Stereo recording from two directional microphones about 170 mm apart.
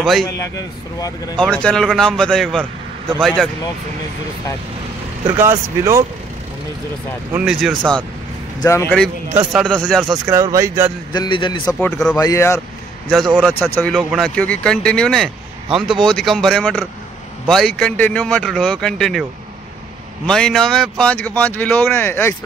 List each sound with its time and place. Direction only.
0.0 s a man's voice: centre (ahead or behind)
1.4 s a man's voice: 5° left (ahead or behind)
5.4 s speech: 15° right (ahead or behind)
7.3 s a man's voice: 5° right (ahead or behind)
8.6 s speech: 15° left (ahead or behind)
9.3 s speech: 5° right (ahead or behind)
10.2 s speech: 20° right (ahead or behind)
11.1 s a man's voice: 30° left (ahead or behind)
11.8 s speech: 5° left (ahead or behind)
12.2 s a man's voice: 20° left (ahead or behind)
13.1 s a man's voice: centre (ahead or behind)
20.2 s a man's voice: 5° left (ahead or behind)